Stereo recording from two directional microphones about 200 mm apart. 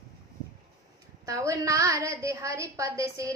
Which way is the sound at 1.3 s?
15° right (ahead or behind).